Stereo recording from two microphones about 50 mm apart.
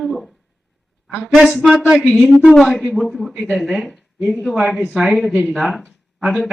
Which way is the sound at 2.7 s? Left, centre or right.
Centre.